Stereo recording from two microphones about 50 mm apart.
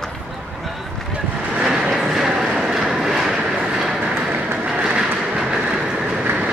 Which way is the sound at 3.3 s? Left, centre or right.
Centre.